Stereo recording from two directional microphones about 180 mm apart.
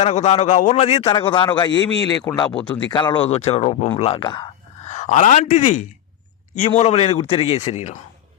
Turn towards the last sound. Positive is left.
turn(degrees=40)  # may be behind; listen again after turning